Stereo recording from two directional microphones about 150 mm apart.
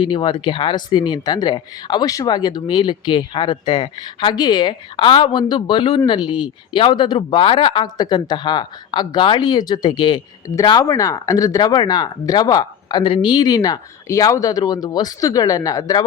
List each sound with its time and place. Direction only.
0.0 s speech: 30° left (ahead or behind)